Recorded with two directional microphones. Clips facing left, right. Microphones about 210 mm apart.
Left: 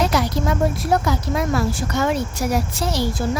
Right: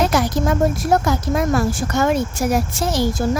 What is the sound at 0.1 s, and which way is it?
A woman's voice, 50° right (ahead or behind).